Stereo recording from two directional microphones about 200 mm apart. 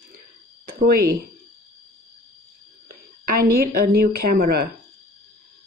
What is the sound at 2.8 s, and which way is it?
A woman's voice, 45° right (ahead or behind).